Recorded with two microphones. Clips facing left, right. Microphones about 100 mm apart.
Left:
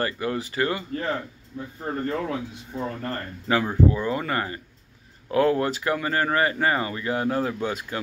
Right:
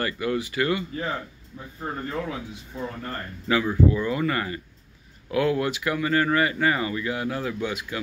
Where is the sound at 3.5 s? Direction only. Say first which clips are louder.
Even; 35° left (ahead or behind).